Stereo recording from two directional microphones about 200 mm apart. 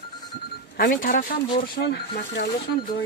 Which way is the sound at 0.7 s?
45° left (ahead or behind).